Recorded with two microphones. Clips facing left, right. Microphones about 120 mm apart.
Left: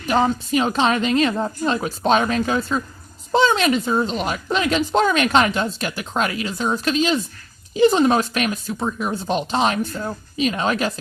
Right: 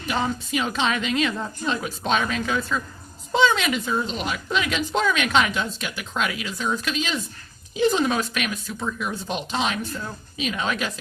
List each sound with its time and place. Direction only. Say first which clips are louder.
0.1 s a woman's voice: left 7 dB; 40° left (ahead or behind)